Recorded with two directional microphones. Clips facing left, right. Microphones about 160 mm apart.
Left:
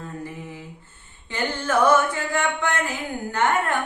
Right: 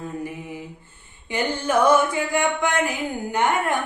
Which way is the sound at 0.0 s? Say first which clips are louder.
Right 3 dB; 15° right (ahead or behind).